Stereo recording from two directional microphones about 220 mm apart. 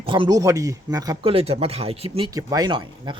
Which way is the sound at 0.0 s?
20° right (ahead or behind).